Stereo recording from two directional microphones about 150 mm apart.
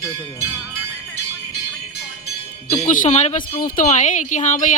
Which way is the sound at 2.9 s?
55° left (ahead or behind).